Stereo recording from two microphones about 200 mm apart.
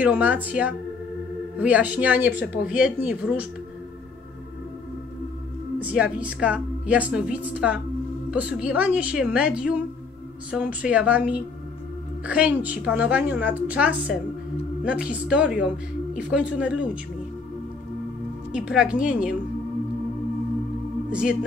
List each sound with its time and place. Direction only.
0.0 s a woman's voice: 5° right (ahead or behind)
5.9 s a woman's voice: 5° right (ahead or behind)
18.5 s a woman's voice: 5° right (ahead or behind)
21.1 s a woman's voice: 5° right (ahead or behind)